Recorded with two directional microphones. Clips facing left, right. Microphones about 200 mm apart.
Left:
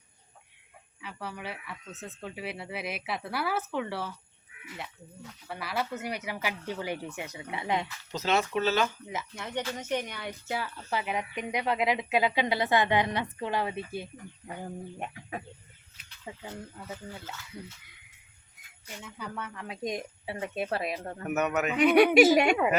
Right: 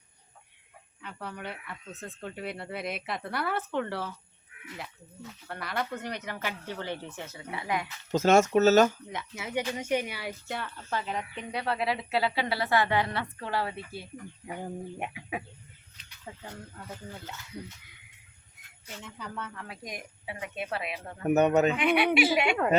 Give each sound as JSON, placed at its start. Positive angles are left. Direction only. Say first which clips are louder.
{"t": 1.0, "sound": "speech", "louder": "even", "side_deg": 5}
{"t": 8.1, "sound": "speech", "louder": "right 7 dB", "side_deg": -45}
{"t": 9.0, "sound": "speech", "louder": "even", "side_deg": 0}
{"t": 10.8, "sound": "speech", "louder": "even", "side_deg": 10}
{"t": 14.9, "sound": "speech", "louder": "right 2 dB", "side_deg": -10}
{"t": 16.2, "sound": "speech", "louder": "left 2 dB", "side_deg": 10}
{"t": 18.6, "sound": "jingle bell", "louder": "left 1 dB", "side_deg": 0}
{"t": 19.0, "sound": "speech", "louder": "left 1 dB", "side_deg": 15}
{"t": 21.2, "sound": "a man's voice", "louder": "right 6 dB", "side_deg": -30}
{"t": 21.8, "sound": "a woman's voice", "louder": "left 5 dB", "side_deg": 40}